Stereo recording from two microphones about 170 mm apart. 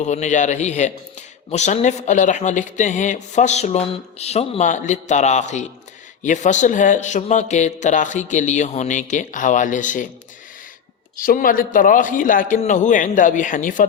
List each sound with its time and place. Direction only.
0.0 s a man's voice: 45° left (ahead or behind)
11.2 s a man's voice: 55° left (ahead or behind)